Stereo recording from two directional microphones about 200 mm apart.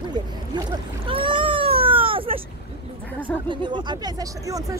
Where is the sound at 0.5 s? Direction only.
25° right (ahead or behind).